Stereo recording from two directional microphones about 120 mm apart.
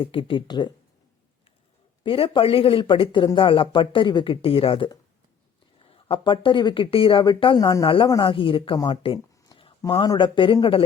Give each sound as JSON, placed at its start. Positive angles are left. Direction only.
{"t": 0.0, "sound": "speech", "side_deg": 50}
{"t": 2.0, "sound": "speech", "side_deg": 50}